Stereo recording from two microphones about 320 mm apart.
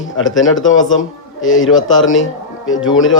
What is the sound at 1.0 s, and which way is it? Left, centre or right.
A man's voice, left.